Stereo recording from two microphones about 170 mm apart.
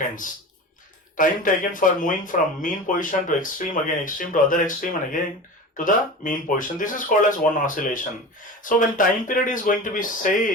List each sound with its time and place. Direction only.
1.1 s speech: 50° left (ahead or behind)